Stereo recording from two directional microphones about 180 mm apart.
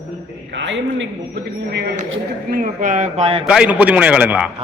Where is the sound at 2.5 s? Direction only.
45° right (ahead or behind).